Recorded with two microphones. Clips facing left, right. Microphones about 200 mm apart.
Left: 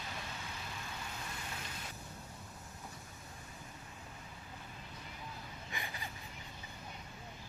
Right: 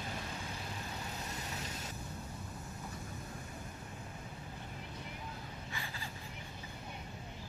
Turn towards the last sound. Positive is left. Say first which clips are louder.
# even
turn(degrees=15)  # may be behind; listen again after turning